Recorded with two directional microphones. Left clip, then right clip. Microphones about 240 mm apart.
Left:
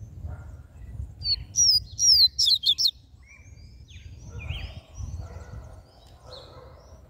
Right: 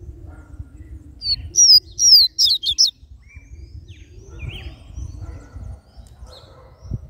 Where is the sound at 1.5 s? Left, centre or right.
Centre.